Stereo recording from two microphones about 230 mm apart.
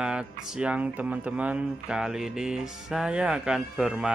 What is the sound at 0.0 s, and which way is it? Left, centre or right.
Speech, centre.